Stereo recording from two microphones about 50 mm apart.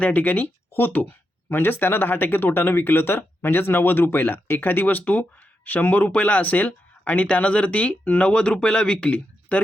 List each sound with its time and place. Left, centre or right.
0.0 s speech: left
1.5 s speech: left